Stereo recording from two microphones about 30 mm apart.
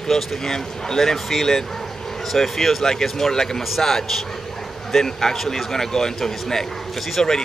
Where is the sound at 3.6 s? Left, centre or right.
Centre.